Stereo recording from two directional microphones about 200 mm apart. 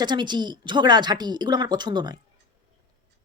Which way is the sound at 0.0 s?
20° right (ahead or behind).